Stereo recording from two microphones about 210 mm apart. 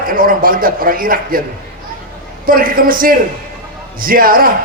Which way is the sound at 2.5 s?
40° right (ahead or behind).